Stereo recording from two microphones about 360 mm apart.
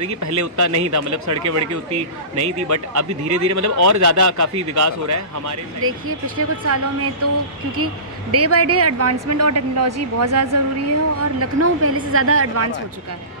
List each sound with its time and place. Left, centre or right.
0.2 s a woman's voice: right
1.9 s speech: right
2.7 s a woman's voice: right
5.8 s a woman's voice: right